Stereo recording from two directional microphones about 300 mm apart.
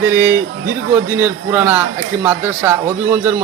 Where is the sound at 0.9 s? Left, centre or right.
Centre.